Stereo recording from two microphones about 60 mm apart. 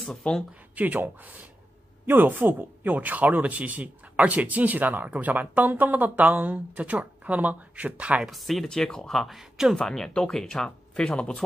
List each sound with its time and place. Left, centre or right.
0.2 s speech: centre
0.7 s speech: right
8.2 s speech: centre
8.6 s speech: centre
9.4 s speech: centre
9.8 s speech: centre